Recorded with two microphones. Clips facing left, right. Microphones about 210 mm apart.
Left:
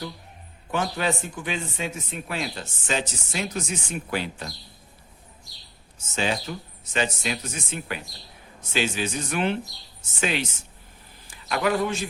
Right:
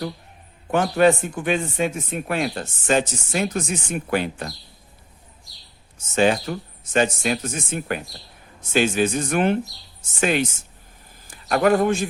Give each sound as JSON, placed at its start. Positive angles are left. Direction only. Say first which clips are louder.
{"t": 0.7, "sound": "speech", "louder": "right 9 dB", "side_deg": -55}
{"t": 6.1, "sound": "a man's voice", "louder": "right 8 dB", "side_deg": -55}